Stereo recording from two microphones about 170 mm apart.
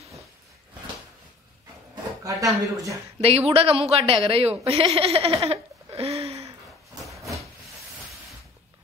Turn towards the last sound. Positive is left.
turn(degrees=0)  # may be behind; listen again after turning